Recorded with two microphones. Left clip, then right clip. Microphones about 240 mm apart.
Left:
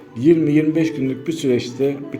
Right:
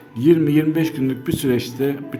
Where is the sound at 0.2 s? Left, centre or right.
Centre.